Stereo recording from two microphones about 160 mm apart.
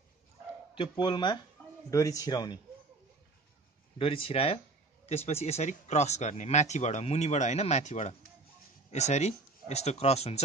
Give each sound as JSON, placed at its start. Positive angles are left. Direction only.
{"t": 0.7, "sound": "a man's voice", "side_deg": 30}
{"t": 4.0, "sound": "speech", "side_deg": 35}